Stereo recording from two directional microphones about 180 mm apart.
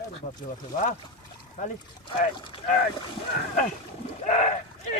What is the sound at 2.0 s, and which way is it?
Speech, 30° left (ahead or behind).